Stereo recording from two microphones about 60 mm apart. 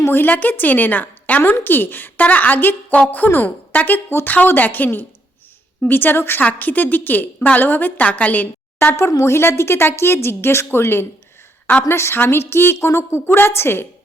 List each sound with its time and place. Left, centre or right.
0.0 s a woman's voice: left
8.8 s a woman's voice: left